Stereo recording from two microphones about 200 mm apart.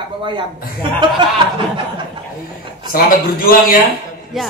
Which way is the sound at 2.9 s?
45° left (ahead or behind).